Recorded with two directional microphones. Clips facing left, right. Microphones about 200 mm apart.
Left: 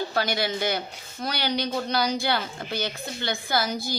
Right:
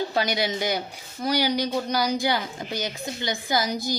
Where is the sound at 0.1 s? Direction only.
20° right (ahead or behind).